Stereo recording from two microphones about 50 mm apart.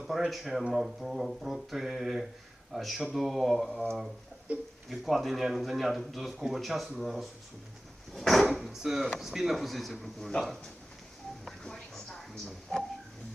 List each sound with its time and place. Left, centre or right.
0.1 s speech: centre
4.5 s speech: right
4.9 s speech: centre
11.4 s a sound: centre